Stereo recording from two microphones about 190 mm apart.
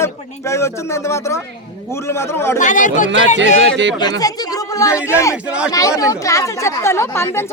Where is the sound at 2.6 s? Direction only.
40° left (ahead or behind).